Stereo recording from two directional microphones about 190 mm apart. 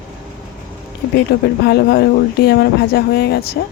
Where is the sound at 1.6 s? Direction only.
55° left (ahead or behind).